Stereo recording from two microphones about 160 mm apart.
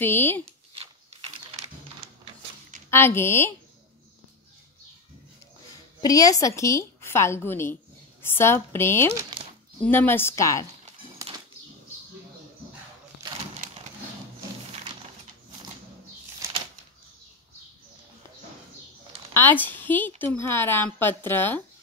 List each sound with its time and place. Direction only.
0.0 s a woman's voice: 15° left (ahead or behind)
1.1 s a sound: 45° right (ahead or behind)
2.9 s a woman's voice: 15° left (ahead or behind)
5.9 s a woman's voice: 20° left (ahead or behind)
9.4 s a sound: 30° right (ahead or behind)
9.8 s a woman's voice: 15° left (ahead or behind)
19.3 s a woman's voice: 10° left (ahead or behind)